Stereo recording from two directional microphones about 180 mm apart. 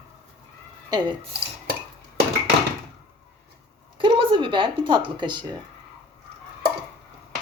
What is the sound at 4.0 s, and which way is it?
Speech, 30° right (ahead or behind).